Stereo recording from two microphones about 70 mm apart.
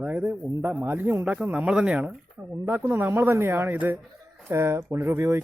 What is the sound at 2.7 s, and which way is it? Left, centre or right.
A man's voice, right.